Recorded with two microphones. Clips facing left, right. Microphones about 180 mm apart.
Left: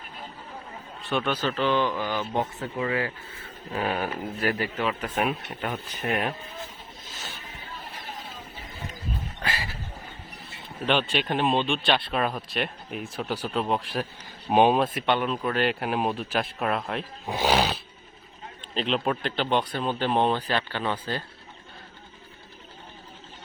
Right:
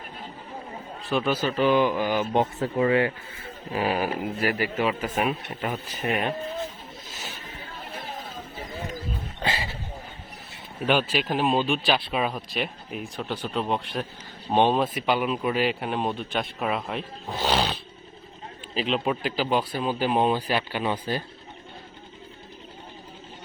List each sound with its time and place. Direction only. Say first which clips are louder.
1.0 s speech: right 2 dB; centre (ahead or behind); by 3.1 s 30° right (ahead or behind)
3.7 s speech: right 3 dB; 5° right (ahead or behind)
9.4 s a sound: right 5 dB; 25° right (ahead or behind)
10.8 s speech: right 1 dB; 5° right (ahead or behind)
17.2 s speech: left 2 dB; 10° left (ahead or behind)
18.7 s speech: right 1 dB; 5° right (ahead or behind)